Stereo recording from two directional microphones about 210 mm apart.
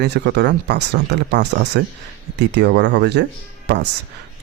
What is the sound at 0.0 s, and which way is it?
Speech, 50° right (ahead or behind).